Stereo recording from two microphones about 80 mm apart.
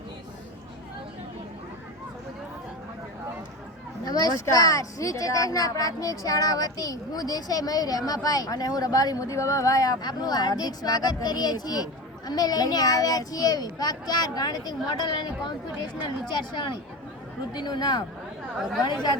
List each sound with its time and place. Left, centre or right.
4.0 s a child's voice: left
17.5 s a child's voice: left